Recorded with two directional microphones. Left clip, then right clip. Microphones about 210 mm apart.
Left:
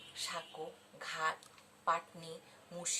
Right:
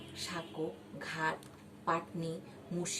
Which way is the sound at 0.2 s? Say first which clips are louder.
Right 3 dB; 15° left (ahead or behind).